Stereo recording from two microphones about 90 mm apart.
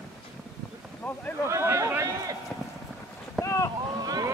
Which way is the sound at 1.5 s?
35° right (ahead or behind).